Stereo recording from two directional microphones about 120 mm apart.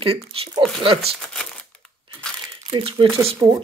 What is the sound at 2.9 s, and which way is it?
Speech, 50° right (ahead or behind).